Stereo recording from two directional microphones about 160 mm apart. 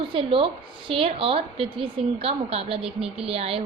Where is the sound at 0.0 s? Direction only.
35° right (ahead or behind).